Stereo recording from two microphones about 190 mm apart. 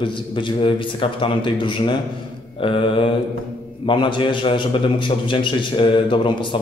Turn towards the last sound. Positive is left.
turn(degrees=25)  # may be behind; listen again after turning